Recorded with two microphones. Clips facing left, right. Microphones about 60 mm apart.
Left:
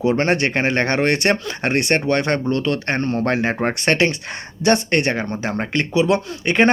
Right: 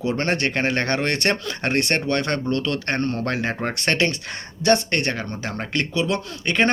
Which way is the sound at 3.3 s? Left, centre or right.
Left.